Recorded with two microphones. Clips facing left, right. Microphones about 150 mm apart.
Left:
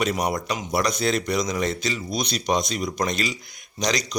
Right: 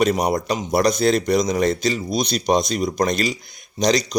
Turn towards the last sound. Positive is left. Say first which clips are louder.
# right 7 dB
turn(degrees=-35)  # may be behind; listen again after turning